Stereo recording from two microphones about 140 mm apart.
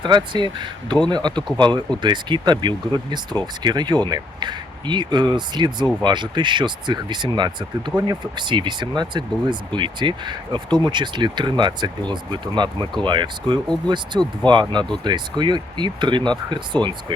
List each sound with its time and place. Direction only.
0.0 s speech: 30° right (ahead or behind)